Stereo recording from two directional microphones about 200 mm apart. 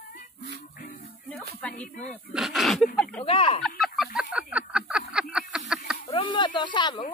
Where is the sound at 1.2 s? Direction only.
Centre (ahead or behind).